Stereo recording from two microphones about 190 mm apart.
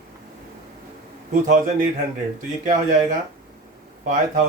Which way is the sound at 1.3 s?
40° right (ahead or behind).